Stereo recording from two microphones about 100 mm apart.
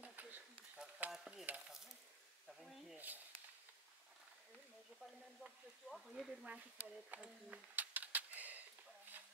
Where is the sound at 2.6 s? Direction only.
Centre (ahead or behind).